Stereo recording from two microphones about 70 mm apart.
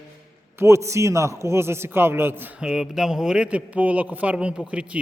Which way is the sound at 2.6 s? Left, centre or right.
Centre.